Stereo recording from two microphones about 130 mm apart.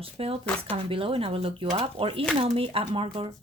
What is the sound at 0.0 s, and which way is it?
Speech, 50° right (ahead or behind).